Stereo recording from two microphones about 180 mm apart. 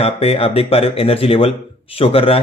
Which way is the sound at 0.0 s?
35° left (ahead or behind).